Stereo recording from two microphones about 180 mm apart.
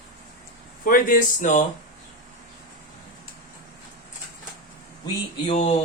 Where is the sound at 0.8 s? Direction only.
50° left (ahead or behind).